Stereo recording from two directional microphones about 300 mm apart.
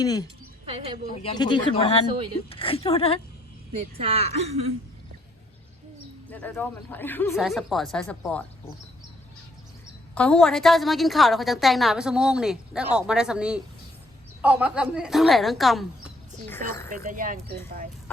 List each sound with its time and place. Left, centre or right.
0.0 s speech: centre
4.0 s speech: centre
6.3 s a woman's voice: centre
10.2 s a woman's voice: centre
16.9 s speech: right